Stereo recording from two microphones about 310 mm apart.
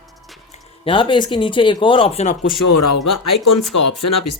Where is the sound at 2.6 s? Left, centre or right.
Left.